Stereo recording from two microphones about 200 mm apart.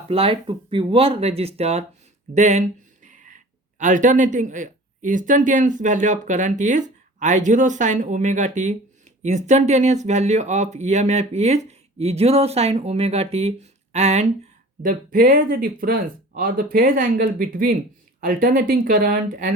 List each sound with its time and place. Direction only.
0.1 s speech: 25° right (ahead or behind)
14.8 s speech: 45° right (ahead or behind)